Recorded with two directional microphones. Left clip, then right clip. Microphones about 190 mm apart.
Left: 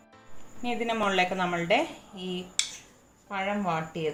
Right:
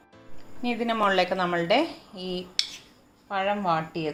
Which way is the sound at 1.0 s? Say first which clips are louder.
Right 4 dB; 30° right (ahead or behind).